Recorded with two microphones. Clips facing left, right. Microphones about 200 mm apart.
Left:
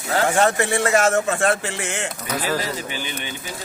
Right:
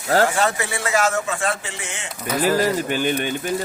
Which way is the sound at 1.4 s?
60° left (ahead or behind).